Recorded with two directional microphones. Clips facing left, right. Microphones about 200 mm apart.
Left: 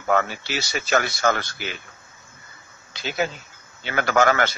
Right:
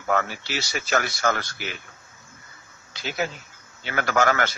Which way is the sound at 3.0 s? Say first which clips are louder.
Left 3 dB; 25° left (ahead or behind).